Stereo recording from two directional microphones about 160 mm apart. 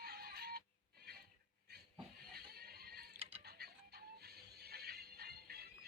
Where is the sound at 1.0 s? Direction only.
75° right (ahead or behind).